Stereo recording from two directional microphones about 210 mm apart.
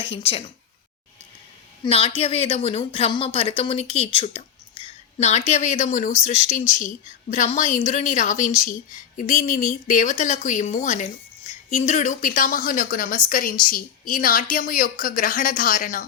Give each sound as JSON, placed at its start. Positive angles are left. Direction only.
{"t": 0.0, "sound": "speech", "side_deg": 25}
{"t": 1.8, "sound": "speech", "side_deg": 25}